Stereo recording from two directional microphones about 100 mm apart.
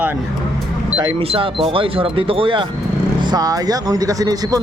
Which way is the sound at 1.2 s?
75° right (ahead or behind).